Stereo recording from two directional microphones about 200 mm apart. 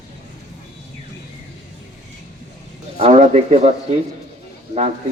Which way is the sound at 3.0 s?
30° right (ahead or behind).